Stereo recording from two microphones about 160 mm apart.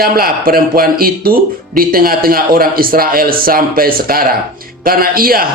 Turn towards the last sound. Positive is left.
turn(degrees=-65)  # may be behind; listen again after turning